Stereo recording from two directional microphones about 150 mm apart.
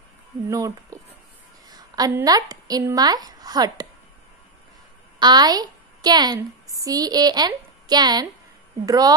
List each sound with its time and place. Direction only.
0.5 s a woman's voice: 20° right (ahead or behind)
1.7 s a sound: 25° right (ahead or behind)
2.2 s a woman's voice: 25° right (ahead or behind)
5.2 s a woman's voice: 30° right (ahead or behind)